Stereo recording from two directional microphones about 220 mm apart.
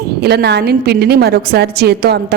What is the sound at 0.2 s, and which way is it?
A woman's voice, 45° right (ahead or behind).